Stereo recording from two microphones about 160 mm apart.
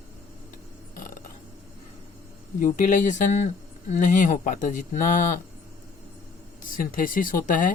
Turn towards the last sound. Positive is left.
turn(degrees=55)  # may be behind; listen again after turning